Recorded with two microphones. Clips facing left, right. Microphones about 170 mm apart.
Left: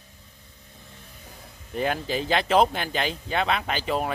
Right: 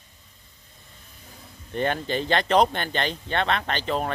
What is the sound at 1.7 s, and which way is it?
Speech, 5° left (ahead or behind).